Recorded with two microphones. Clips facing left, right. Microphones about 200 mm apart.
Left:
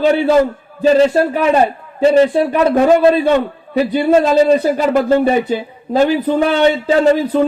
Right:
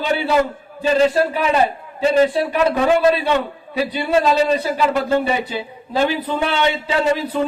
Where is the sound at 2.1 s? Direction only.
45° left (ahead or behind).